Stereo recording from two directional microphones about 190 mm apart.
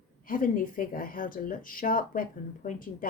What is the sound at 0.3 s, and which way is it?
Speech, 45° left (ahead or behind).